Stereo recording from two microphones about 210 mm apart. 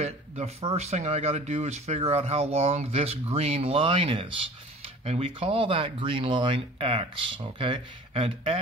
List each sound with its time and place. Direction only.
0.0 s speech: 30° right (ahead or behind)